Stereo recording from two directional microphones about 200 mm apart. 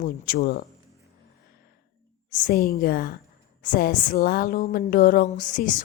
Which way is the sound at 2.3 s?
45° left (ahead or behind).